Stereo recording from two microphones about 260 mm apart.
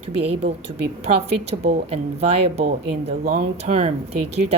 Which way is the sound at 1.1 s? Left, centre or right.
Right.